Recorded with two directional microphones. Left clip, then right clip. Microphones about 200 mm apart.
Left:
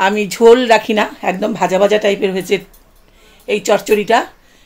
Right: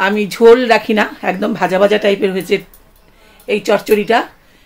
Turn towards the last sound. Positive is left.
turn(degrees=15)  # may be behind; listen again after turning